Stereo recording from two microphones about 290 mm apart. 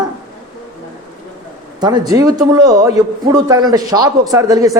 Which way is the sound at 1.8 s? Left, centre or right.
Centre.